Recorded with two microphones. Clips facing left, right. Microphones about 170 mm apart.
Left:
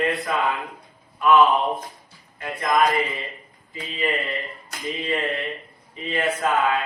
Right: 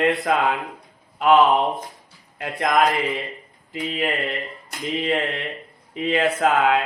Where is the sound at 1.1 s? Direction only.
70° right (ahead or behind).